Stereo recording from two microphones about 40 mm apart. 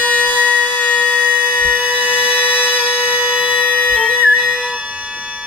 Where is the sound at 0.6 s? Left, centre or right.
Left.